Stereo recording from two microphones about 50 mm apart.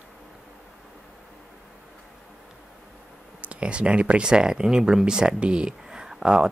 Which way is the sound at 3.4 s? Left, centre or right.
Right.